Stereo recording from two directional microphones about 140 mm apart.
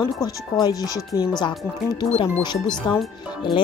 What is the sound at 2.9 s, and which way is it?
Speech, centre (ahead or behind).